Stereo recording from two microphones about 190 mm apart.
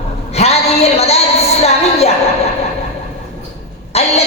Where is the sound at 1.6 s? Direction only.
35° left (ahead or behind).